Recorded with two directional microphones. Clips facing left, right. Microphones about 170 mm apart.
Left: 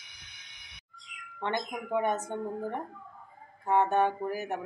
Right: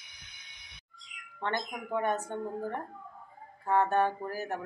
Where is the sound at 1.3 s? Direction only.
15° left (ahead or behind).